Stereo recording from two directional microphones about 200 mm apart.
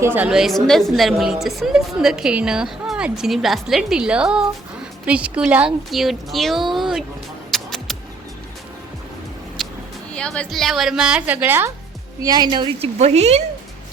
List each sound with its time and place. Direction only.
0.0 s a woman's voice: 10° right (ahead or behind)
7.5 s music: centre (ahead or behind)
9.6 s a sound: centre (ahead or behind)
10.1 s a woman's voice: 5° left (ahead or behind); by 13.4 s 35° right (ahead or behind)